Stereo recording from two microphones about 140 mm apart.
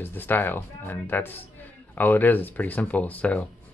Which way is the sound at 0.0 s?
15° left (ahead or behind).